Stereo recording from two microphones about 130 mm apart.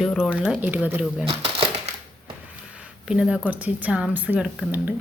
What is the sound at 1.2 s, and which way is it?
Crumpling, 45° right (ahead or behind).